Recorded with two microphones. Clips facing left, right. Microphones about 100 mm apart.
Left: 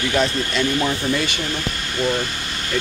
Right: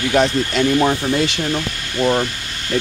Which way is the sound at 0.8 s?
50° right (ahead or behind).